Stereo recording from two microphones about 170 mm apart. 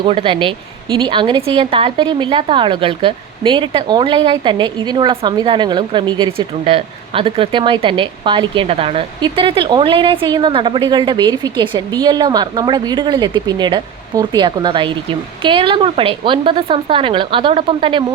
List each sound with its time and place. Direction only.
0.0 s a woman's voice: 30° right (ahead or behind)